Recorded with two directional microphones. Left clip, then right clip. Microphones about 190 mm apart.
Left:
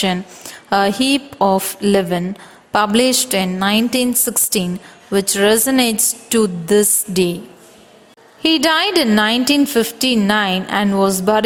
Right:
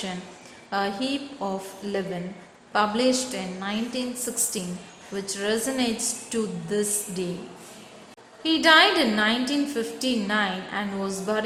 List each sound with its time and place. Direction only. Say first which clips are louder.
0.7 s a woman's voice: left 12 dB; 55° left (ahead or behind)
8.4 s a woman's voice: left 3 dB; 55° left (ahead or behind)